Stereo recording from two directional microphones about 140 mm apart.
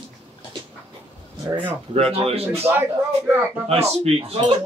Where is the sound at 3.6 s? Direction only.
45° right (ahead or behind).